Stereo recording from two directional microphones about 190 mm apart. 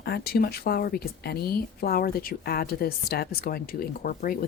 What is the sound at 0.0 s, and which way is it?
Speech, 55° left (ahead or behind).